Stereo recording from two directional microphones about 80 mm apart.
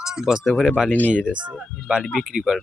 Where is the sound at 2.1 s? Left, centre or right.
Centre.